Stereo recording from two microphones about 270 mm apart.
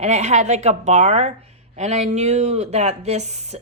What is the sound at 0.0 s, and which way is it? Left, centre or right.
Speech, right.